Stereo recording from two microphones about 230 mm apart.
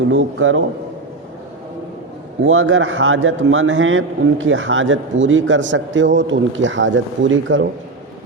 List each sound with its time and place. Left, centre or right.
0.1 s a man's voice: right
2.4 s a man's voice: right